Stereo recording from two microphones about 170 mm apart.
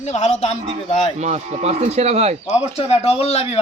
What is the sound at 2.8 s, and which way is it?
Speech, 35° left (ahead or behind).